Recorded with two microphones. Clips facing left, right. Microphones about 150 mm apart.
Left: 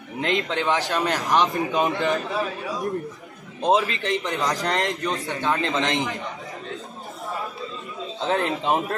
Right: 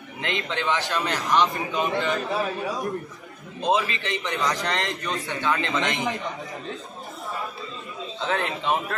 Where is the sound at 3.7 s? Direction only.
45° left (ahead or behind).